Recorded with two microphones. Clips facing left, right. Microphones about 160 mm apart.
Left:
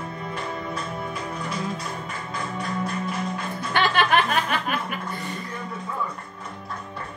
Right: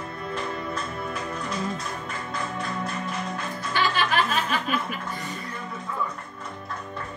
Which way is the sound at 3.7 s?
60° left (ahead or behind).